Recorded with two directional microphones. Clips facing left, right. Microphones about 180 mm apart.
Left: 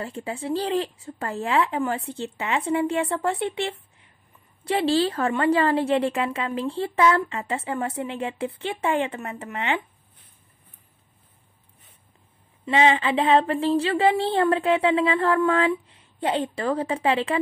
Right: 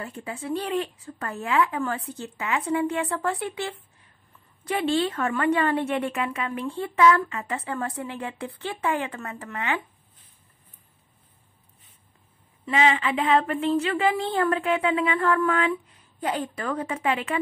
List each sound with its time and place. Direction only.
0.0 s a woman's voice: 30° left (ahead or behind)
12.6 s a woman's voice: 30° left (ahead or behind)